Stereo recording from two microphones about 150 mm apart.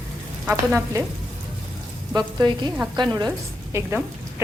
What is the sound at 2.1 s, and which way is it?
Speech, 30° right (ahead or behind).